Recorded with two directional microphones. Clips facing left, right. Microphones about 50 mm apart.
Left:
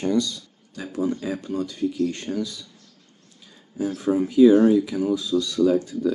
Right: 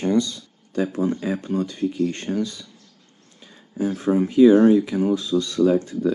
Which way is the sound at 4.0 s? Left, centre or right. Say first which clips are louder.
Right 1 dB; right.